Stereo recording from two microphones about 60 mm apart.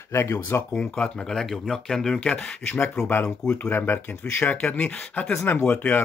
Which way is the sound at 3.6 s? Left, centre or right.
Left.